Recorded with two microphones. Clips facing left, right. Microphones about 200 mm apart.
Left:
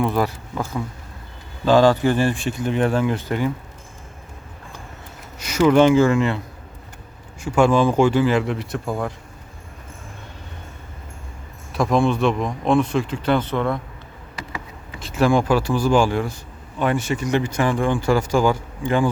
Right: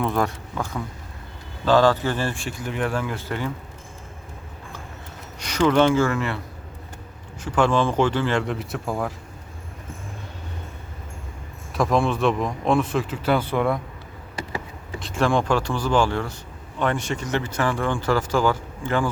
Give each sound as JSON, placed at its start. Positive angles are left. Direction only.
{"t": 0.0, "sound": "speech", "side_deg": 0}
{"t": 1.6, "sound": "speech", "side_deg": 15}
{"t": 5.4, "sound": "speech", "side_deg": 10}
{"t": 7.4, "sound": "speech", "side_deg": 10}
{"t": 11.7, "sound": "speech", "side_deg": 0}
{"t": 14.9, "sound": "speech", "side_deg": 5}